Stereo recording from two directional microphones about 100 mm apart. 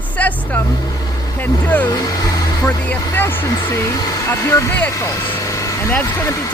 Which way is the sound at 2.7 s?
15° left (ahead or behind).